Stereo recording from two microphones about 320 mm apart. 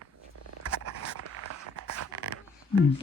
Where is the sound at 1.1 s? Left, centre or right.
Right.